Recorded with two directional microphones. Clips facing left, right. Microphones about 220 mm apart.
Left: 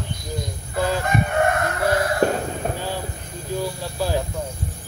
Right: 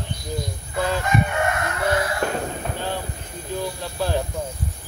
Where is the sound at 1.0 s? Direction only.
50° left (ahead or behind).